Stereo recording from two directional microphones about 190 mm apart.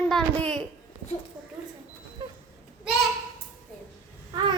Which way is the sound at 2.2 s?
20° right (ahead or behind).